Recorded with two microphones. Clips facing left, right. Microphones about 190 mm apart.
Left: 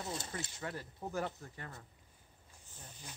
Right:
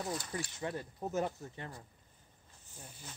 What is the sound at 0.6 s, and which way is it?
Speech, 20° right (ahead or behind).